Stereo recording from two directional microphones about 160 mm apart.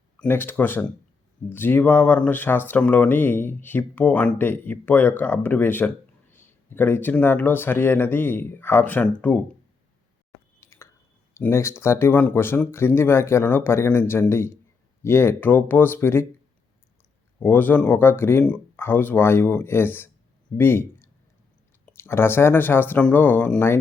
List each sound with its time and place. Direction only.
0.2 s speech: 15° left (ahead or behind)
10.6 s a sound: 15° left (ahead or behind)
11.3 s speech: 15° left (ahead or behind)
17.4 s speech: 10° left (ahead or behind)